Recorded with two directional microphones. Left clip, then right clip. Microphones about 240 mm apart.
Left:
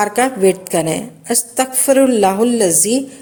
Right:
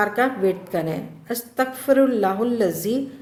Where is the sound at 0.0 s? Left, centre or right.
Left.